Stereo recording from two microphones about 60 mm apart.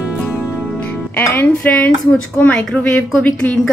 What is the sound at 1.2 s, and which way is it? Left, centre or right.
Music, left.